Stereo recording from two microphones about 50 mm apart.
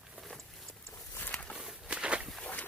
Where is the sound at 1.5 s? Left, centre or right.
Centre.